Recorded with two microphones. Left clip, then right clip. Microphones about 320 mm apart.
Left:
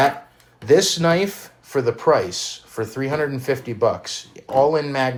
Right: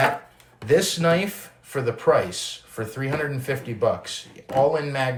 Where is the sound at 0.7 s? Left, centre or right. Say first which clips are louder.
Left 4 dB; centre.